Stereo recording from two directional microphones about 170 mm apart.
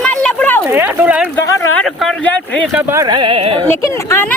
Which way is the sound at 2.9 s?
20° right (ahead or behind).